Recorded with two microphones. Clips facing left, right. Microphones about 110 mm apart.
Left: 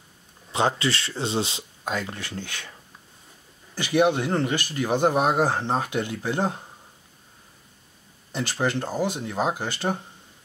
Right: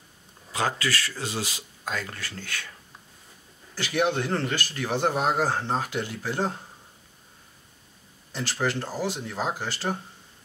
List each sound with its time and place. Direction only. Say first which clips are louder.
0.5 s speech: left 4 dB; 25° left (ahead or behind)
3.9 s speech: left 4 dB; 15° left (ahead or behind)
8.3 s speech: left 2 dB; 20° left (ahead or behind)